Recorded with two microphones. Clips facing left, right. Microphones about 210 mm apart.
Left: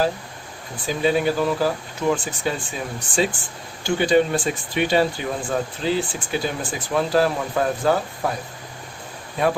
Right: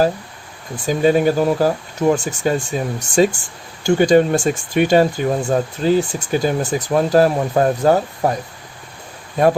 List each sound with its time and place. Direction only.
0.9 s speech: 45° right (ahead or behind)
9.4 s speech: 45° right (ahead or behind)